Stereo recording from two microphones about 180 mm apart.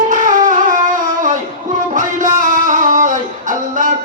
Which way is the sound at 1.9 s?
45° right (ahead or behind).